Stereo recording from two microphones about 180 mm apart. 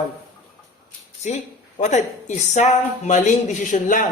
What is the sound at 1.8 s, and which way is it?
Speech, 40° left (ahead or behind).